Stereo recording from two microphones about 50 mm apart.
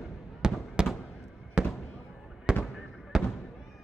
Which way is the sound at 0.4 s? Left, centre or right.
Centre.